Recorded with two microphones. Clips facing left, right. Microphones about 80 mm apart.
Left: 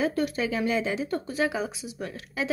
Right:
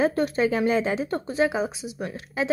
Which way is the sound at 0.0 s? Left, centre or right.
Right.